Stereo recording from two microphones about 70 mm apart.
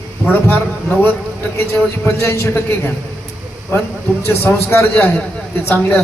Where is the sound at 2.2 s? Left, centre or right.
Left.